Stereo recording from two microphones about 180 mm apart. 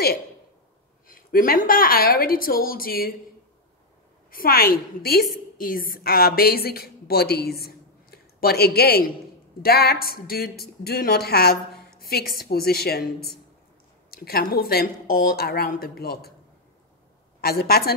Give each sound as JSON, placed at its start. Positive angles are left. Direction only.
{"t": 1.0, "sound": "a woman's voice", "side_deg": 50}
{"t": 4.3, "sound": "a woman's voice", "side_deg": 55}
{"t": 17.4, "sound": "a woman's voice", "side_deg": 60}